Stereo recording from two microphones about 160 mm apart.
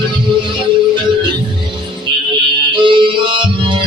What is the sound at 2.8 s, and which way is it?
Music, 30° right (ahead or behind).